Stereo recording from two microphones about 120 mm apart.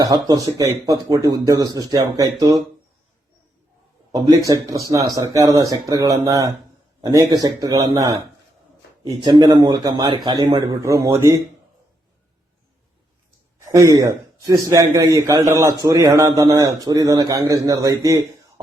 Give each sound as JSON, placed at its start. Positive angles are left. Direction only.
{"t": 0.0, "sound": "speech", "side_deg": -30}
{"t": 4.1, "sound": "a man's voice", "side_deg": -30}
{"t": 13.7, "sound": "a man's voice", "side_deg": -25}